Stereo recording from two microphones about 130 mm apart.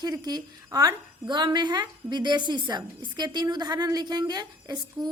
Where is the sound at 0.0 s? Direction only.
30° right (ahead or behind).